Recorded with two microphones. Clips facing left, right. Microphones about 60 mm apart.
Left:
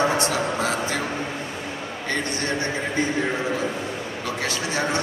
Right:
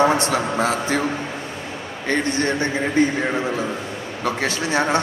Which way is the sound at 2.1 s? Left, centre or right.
Right.